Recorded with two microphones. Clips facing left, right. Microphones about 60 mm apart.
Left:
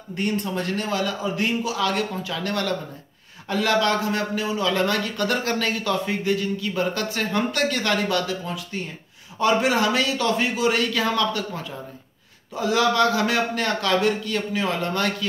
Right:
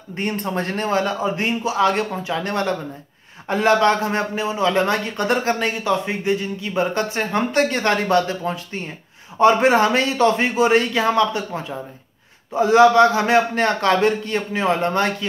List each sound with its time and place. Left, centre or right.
0.1 s a man's voice: right